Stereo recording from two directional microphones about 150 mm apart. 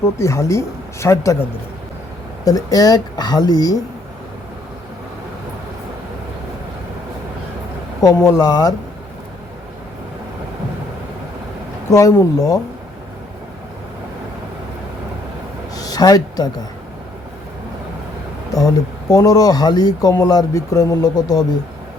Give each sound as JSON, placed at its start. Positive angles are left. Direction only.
{"t": 0.0, "sound": "speech", "side_deg": 20}
{"t": 8.0, "sound": "speech", "side_deg": 20}
{"t": 11.9, "sound": "speech", "side_deg": 20}
{"t": 15.7, "sound": "a sound", "side_deg": 25}
{"t": 18.5, "sound": "speech", "side_deg": 20}